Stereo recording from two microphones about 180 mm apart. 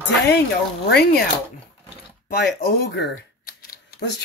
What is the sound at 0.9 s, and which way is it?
Speech, 60° left (ahead or behind).